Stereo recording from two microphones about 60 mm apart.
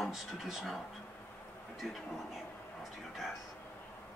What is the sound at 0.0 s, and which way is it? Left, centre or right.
Speech, centre.